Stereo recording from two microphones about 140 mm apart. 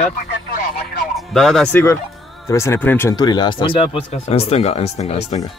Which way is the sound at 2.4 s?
20° left (ahead or behind).